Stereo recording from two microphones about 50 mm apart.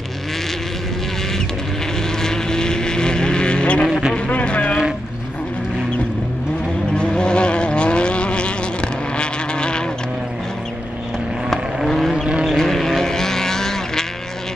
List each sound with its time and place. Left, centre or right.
2.2 s vehicle: centre
6.9 s vehicle: centre
11.8 s vehicle: centre
12.1 s vehicle: centre
12.4 s vehicle: centre